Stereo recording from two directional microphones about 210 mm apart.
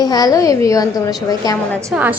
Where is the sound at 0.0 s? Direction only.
20° left (ahead or behind).